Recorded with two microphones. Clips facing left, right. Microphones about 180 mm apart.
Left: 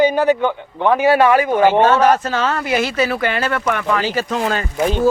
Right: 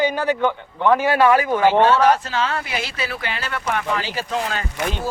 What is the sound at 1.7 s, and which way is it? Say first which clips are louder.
Speech: even; 50° left (ahead or behind).